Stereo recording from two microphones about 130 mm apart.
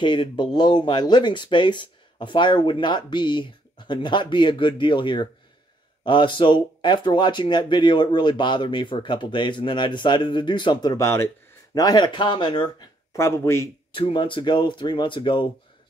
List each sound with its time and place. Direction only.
0.0 s speech: 35° left (ahead or behind)
13.2 s speech: 20° left (ahead or behind)
13.9 s speech: 45° left (ahead or behind)